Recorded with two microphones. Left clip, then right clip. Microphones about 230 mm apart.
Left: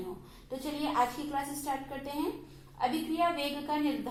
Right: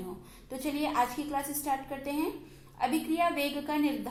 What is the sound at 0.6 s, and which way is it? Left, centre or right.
A woman's voice, right.